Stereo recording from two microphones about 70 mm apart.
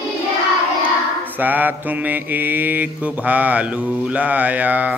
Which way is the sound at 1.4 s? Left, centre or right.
Right.